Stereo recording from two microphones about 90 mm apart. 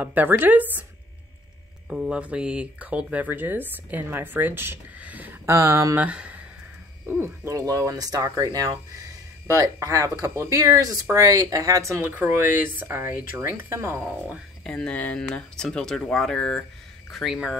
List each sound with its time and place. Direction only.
0.0 s speech: 20° right (ahead or behind)
1.9 s speech: 10° right (ahead or behind)
5.5 s speech: 35° right (ahead or behind)
5.9 s speech: 15° right (ahead or behind)
7.1 s speech: 25° right (ahead or behind)
7.5 s speech: 40° right (ahead or behind)
14.0 s speech: 15° right (ahead or behind)
14.6 s speech: 5° left (ahead or behind)